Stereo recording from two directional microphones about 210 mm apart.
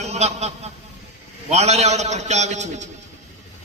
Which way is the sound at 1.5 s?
30° right (ahead or behind).